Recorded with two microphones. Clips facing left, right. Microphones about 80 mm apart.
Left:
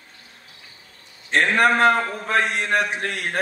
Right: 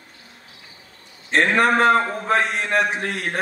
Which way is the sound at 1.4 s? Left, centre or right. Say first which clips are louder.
Even; right.